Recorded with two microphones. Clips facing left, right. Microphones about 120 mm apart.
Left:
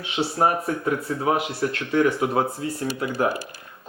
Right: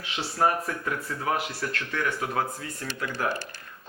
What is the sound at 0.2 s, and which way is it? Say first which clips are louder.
Speech: left 4 dB; 25° left (ahead or behind).